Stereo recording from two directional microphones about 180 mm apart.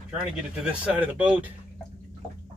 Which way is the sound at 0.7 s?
5° right (ahead or behind).